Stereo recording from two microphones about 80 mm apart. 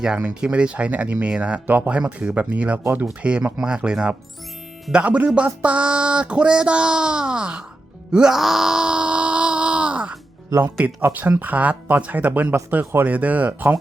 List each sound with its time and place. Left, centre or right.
0.0 s speech: centre
8.1 s wail: centre
10.5 s speech: right
10.8 s speech: right
12.8 s speech: right
13.1 s speech: centre